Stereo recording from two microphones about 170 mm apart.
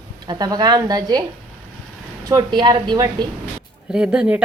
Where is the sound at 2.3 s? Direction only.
25° right (ahead or behind).